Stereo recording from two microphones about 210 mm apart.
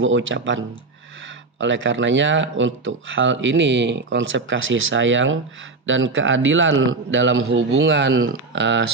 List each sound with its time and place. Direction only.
0.0 s speech: 65° right (ahead or behind)